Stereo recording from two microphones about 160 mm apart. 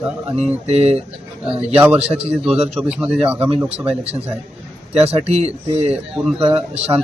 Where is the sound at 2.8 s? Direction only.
5° right (ahead or behind).